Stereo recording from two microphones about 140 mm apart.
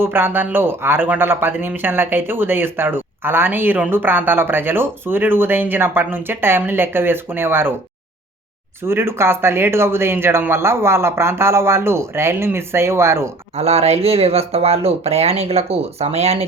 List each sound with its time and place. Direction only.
0.0 s speech: 15° right (ahead or behind)
8.8 s speech: 15° right (ahead or behind)
13.6 s speech: 50° right (ahead or behind)